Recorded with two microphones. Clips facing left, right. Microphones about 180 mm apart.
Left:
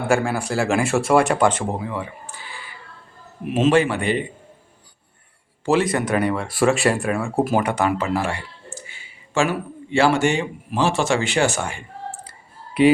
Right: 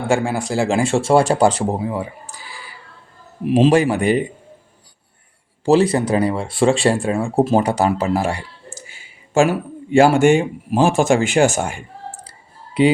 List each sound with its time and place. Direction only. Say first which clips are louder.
0.1 s speech: right 2 dB; 20° right (ahead or behind); by 4.2 s 40° right (ahead or behind)
5.6 s speech: right 5 dB; 30° right (ahead or behind)